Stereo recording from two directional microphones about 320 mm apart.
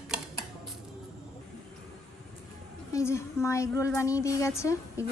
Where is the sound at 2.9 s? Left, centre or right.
Centre.